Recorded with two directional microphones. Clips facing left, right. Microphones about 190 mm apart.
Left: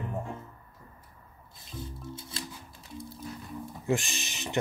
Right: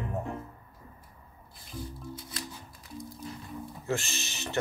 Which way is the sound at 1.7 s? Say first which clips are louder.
Right 1 dB; 25° left (ahead or behind).